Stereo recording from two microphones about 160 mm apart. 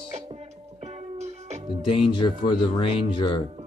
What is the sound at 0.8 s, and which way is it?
Music, 45° right (ahead or behind).